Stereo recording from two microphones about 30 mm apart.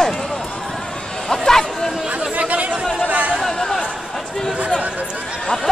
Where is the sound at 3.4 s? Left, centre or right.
Centre.